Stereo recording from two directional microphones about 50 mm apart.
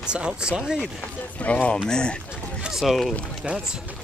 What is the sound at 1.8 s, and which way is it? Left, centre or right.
Speech, centre.